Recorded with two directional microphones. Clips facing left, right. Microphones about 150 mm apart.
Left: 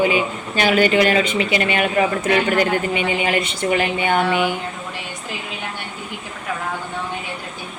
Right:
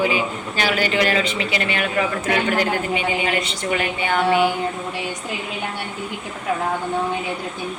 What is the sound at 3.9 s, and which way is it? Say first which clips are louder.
Music: left 3 dB; 20° left (ahead or behind).